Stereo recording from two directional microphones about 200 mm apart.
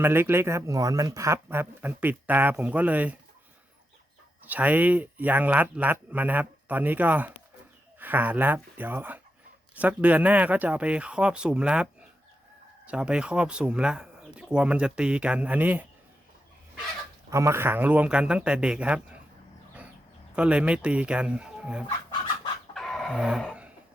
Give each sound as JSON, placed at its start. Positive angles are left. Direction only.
{"t": 0.0, "sound": "speech", "side_deg": -10}
{"t": 4.4, "sound": "speech", "side_deg": -10}
{"t": 12.9, "sound": "speech", "side_deg": -5}
{"t": 17.3, "sound": "speech", "side_deg": -15}
{"t": 20.3, "sound": "speech", "side_deg": -5}
{"t": 22.7, "sound": "dog", "side_deg": 0}
{"t": 23.4, "sound": "a sound", "side_deg": -5}